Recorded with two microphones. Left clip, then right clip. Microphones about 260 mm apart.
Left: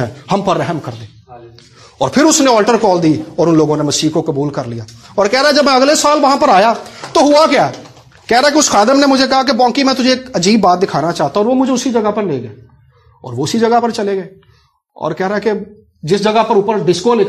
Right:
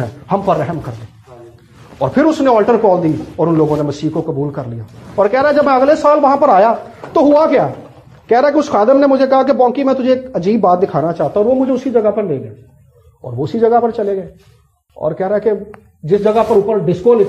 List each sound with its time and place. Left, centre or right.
0.0 s a man's voice: left
2.0 s speech: left
13.4 s speech: left